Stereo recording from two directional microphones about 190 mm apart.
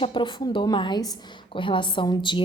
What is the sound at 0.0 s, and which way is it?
A woman's voice, 25° left (ahead or behind).